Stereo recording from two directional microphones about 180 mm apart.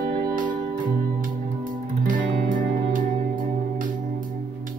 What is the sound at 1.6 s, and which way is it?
Music, 50° right (ahead or behind).